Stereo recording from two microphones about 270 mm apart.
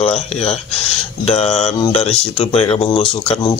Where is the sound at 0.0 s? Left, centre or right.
Left.